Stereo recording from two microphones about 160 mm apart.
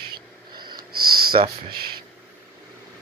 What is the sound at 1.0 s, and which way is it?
Speech, 70° right (ahead or behind).